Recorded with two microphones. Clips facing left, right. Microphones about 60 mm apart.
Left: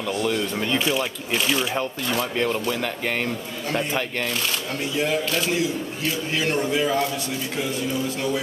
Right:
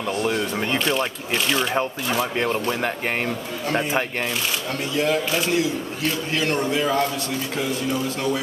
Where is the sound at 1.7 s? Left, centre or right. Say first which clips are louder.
Right 2 dB; centre.